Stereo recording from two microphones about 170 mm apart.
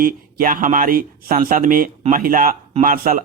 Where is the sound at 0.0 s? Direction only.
55° right (ahead or behind).